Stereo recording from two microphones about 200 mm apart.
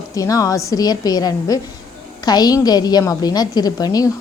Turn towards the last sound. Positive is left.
turn(degrees=20)  # may be behind; listen again after turning